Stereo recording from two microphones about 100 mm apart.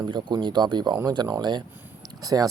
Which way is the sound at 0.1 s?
50° right (ahead or behind).